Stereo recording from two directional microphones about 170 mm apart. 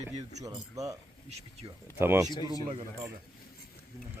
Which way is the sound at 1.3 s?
40° right (ahead or behind).